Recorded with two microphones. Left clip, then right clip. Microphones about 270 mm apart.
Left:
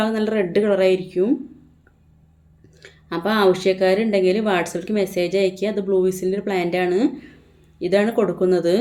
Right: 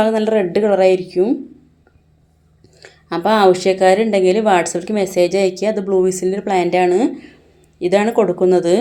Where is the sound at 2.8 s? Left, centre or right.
Centre.